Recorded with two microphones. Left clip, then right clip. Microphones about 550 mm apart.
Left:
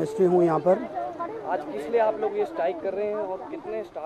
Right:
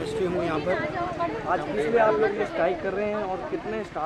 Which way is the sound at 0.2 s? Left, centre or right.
Left.